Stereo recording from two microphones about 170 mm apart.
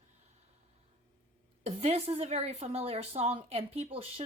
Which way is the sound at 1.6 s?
35° right (ahead or behind).